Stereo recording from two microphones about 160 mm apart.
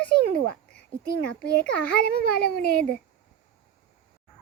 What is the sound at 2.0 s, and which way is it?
Speech, 75° left (ahead or behind).